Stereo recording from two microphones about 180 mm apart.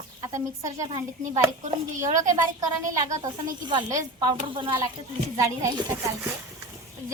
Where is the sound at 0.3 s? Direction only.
15° right (ahead or behind).